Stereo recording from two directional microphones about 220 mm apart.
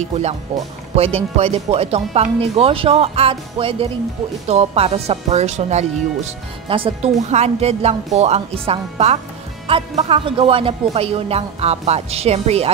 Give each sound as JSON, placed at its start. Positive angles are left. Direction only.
{"t": 0.9, "sound": "speech", "side_deg": -25}